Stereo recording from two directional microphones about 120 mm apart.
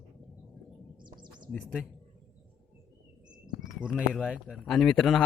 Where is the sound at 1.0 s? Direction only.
40° right (ahead or behind).